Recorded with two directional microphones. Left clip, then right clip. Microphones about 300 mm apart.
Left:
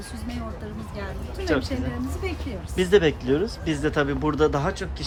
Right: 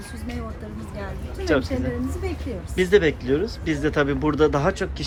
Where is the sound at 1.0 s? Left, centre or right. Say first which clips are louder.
Right 1 dB; centre.